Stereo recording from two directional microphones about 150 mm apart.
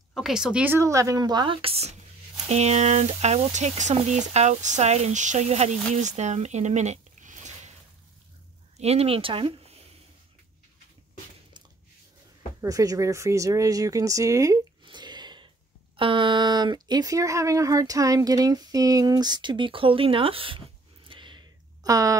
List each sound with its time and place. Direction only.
0.1 s speech: 5° right (ahead or behind)
0.7 s speech: 20° right (ahead or behind); by 7.7 s 55° right (ahead or behind)
8.7 s speech: 45° right (ahead or behind)
12.6 s speech: 25° right (ahead or behind)
21.1 s a sound: 30° right (ahead or behind)